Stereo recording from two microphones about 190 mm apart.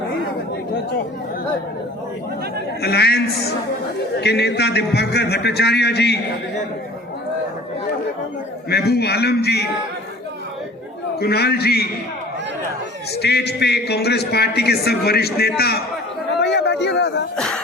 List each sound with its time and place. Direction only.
2.8 s a man's voice: 60° left (ahead or behind)
8.7 s a man's voice: 60° left (ahead or behind)
11.2 s a man's voice: 55° left (ahead or behind)
13.2 s a man's voice: 60° left (ahead or behind)
16.4 s a sound: 65° left (ahead or behind)
17.3 s a sound: 5° left (ahead or behind)